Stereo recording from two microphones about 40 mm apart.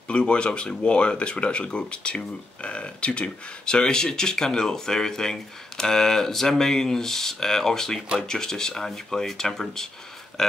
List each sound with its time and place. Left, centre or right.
0.1 s speech: left